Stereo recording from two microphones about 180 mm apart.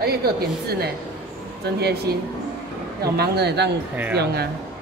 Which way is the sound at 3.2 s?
65° right (ahead or behind).